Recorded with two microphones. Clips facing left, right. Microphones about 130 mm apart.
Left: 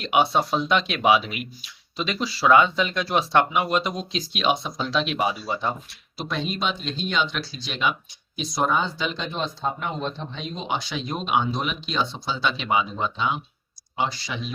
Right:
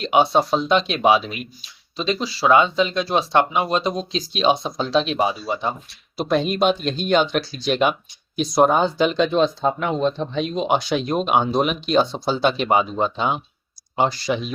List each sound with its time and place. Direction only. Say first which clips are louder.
0.0 s speech: right 4 dB; 25° right (ahead or behind)
6.1 s speech: right 9 dB; 50° right (ahead or behind); by 9.9 s 90° right
10.3 s speech: right 9 dB; 65° right (ahead or behind)